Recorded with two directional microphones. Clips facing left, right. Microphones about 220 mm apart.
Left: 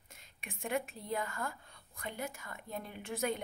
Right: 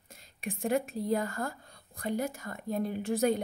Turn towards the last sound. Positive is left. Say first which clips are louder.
# right 9 dB
turn(degrees=-35)  # may be behind; listen again after turning